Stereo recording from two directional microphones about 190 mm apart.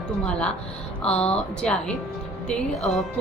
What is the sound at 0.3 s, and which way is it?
A woman's voice, 5° left (ahead or behind).